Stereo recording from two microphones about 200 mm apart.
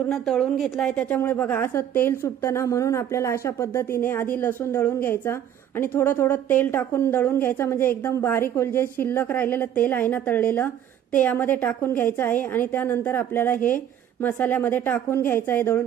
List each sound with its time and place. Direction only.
0.1 s a woman's voice: 5° left (ahead or behind)